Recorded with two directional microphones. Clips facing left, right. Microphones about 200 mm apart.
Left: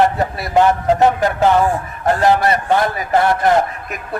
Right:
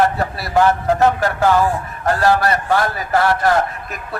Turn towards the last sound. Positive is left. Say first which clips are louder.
# left 2 dB
turn(degrees=20)  # may be behind; listen again after turning